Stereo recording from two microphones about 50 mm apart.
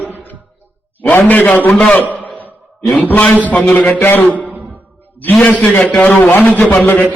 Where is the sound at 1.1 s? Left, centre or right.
Left.